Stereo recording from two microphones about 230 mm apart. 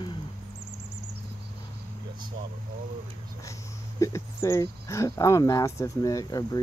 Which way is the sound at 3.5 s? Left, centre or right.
Centre.